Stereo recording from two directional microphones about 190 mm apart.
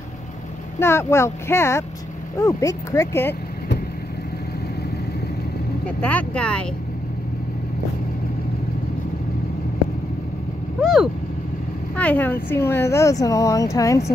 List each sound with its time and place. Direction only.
0.7 s speech: 15° left (ahead or behind)
5.9 s speech: 10° left (ahead or behind)
10.8 s vehicle: centre (ahead or behind)
11.9 s speech: 10° left (ahead or behind)